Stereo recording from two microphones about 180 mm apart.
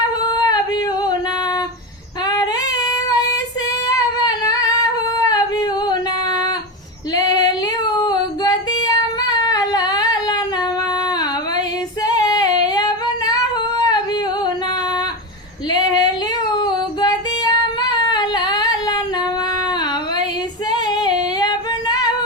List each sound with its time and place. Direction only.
0.2 s yodeling: 20° left (ahead or behind)
2.2 s female singing: 20° left (ahead or behind)
3.8 s singing: 20° left (ahead or behind)
5.8 s female singing: 20° left (ahead or behind)
12.0 s singing: 20° left (ahead or behind)
15.7 s female singing: 25° left (ahead or behind)
20.7 s female singing: 25° left (ahead or behind)